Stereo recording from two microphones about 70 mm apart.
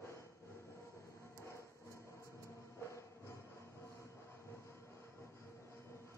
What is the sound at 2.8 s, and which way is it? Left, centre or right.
Music, left.